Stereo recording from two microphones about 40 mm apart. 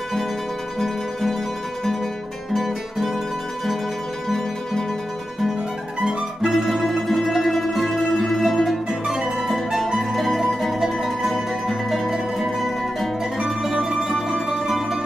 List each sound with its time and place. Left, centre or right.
2.5 s music: centre
5.9 s music: centre
6.5 s music: centre
9.0 s music: centre
10.1 s music: centre
13.4 s mandolin: centre